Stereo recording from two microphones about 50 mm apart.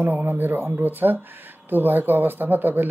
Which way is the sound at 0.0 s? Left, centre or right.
Right.